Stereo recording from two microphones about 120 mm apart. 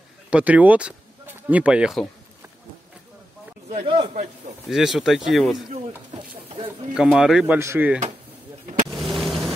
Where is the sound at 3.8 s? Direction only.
45° right (ahead or behind).